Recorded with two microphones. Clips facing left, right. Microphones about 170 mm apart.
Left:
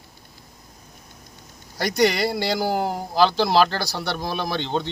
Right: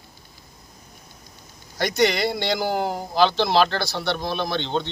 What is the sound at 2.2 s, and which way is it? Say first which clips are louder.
Speech: left 1 dB; 5° left (ahead or behind).